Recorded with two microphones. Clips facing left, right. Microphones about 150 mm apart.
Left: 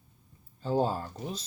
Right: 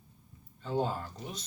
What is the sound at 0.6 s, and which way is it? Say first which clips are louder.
Speech: left 4 dB; 35° left (ahead or behind).